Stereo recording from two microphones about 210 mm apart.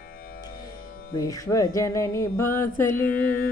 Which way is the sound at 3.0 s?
40° left (ahead or behind).